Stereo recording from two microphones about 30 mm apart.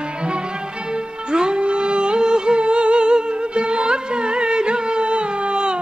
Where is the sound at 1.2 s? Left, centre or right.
Right.